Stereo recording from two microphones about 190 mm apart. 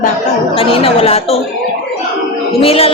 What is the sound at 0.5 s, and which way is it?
Speech, 30° left (ahead or behind).